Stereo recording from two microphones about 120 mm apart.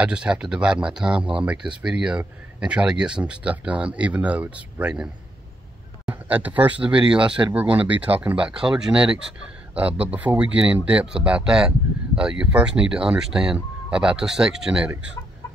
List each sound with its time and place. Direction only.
0.0 s speech: 10° right (ahead or behind)